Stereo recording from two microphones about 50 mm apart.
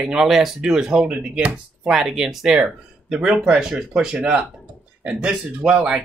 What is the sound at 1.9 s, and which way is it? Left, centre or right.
Speech, centre.